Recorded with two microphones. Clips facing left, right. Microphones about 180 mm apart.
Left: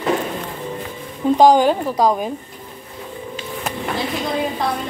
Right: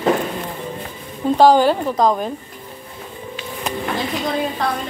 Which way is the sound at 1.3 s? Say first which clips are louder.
Even; 15° left (ahead or behind).